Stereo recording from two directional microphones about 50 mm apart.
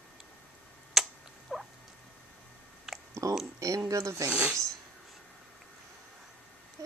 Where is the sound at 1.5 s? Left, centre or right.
Centre.